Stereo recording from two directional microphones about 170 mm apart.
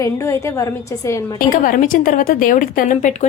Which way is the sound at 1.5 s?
55° left (ahead or behind).